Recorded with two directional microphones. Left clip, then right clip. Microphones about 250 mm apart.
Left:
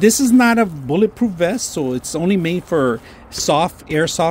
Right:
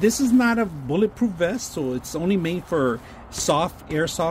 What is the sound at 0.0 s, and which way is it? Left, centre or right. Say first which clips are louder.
Speech: left 6 dB; left.